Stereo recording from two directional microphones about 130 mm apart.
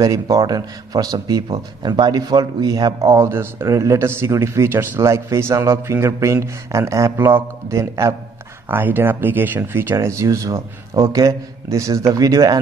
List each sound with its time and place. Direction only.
0.0 s speech: 25° right (ahead or behind)